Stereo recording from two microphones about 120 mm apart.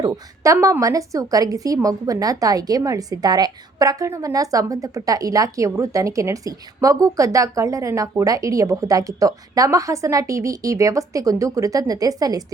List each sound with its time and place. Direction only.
0.0 s a woman's voice: 25° right (ahead or behind)